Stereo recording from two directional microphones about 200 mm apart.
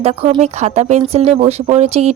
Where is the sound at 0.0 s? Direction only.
30° right (ahead or behind).